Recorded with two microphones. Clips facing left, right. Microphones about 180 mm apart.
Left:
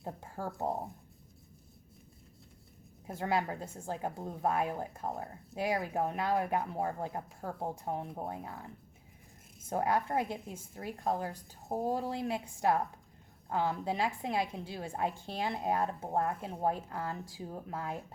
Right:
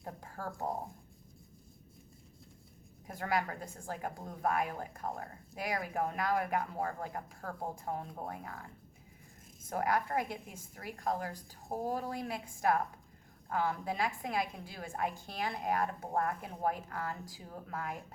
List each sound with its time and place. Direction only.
0.0 s a woman's voice: 25° left (ahead or behind)
3.1 s a woman's voice: 25° left (ahead or behind)
9.6 s a woman's voice: 25° left (ahead or behind)